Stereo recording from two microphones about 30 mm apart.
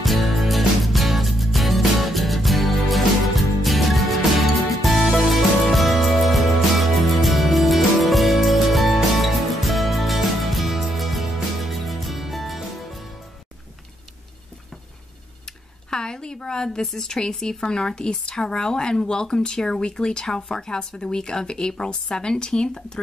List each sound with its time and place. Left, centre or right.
0.0 s music: centre
15.9 s a sound: left
17.2 s a woman's voice: left